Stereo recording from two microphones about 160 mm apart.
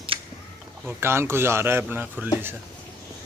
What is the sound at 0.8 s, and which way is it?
Speech, 15° right (ahead or behind).